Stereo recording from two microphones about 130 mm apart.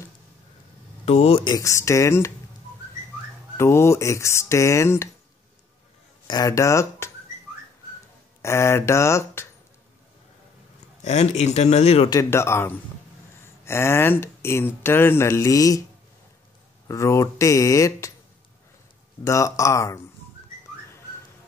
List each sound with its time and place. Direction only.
1.0 s speech: 50° left (ahead or behind)
1.4 s speech: 30° left (ahead or behind)
3.5 s speech: 20° left (ahead or behind)
6.2 s speech: 30° left (ahead or behind)
8.4 s speech: 20° left (ahead or behind)
11.0 s speech: 60° left (ahead or behind)
12.1 s speech: 20° left (ahead or behind)
16.8 s speech: 25° left (ahead or behind)
19.2 s speech: 25° left (ahead or behind)